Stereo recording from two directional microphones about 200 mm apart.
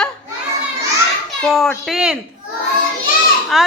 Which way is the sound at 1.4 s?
Centre (ahead or behind).